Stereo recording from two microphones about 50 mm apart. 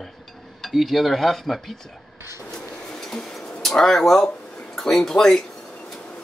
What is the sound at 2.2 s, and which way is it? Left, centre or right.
Printer, right.